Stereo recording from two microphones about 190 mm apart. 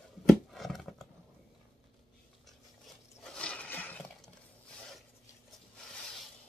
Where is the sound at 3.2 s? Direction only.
5° left (ahead or behind).